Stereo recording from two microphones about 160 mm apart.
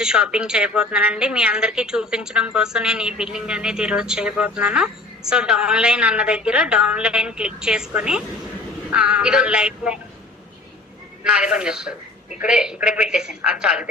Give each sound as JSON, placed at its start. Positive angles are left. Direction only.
{"t": 0.0, "sound": "a woman's voice", "side_deg": -5}
{"t": 11.2, "sound": "a woman's voice", "side_deg": -5}